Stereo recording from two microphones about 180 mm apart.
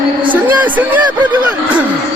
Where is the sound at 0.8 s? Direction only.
10° right (ahead or behind).